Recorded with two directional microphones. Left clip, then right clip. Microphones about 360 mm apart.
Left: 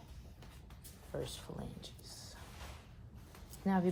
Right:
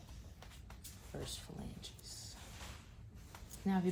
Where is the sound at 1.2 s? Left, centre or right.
Centre.